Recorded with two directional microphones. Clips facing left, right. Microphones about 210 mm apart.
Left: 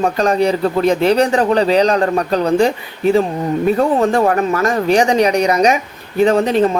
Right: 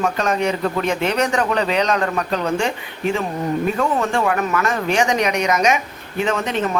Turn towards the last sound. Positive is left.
turn(degrees=35)  # may be behind; listen again after turning